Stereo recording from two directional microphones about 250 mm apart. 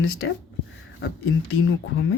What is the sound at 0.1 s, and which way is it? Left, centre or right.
Speech, left.